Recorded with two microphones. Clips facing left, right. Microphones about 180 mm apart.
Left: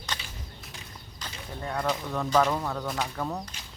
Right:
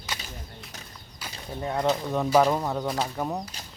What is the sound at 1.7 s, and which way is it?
Speech, 25° right (ahead or behind).